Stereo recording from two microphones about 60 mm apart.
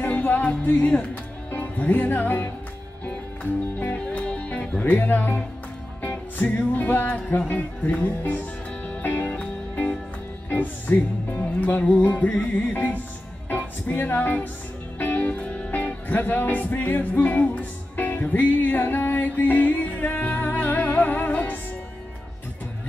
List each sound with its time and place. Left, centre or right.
0.0 s music: left
0.7 s speech: left
4.0 s music: centre
10.5 s speech: left
12.0 s music: left